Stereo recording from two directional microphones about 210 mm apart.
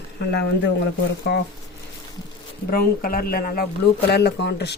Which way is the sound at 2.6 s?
45° left (ahead or behind).